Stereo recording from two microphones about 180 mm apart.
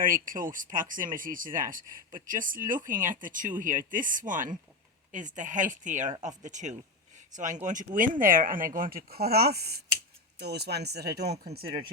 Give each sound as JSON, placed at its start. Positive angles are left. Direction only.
{"t": 0.0, "sound": "speech", "side_deg": -50}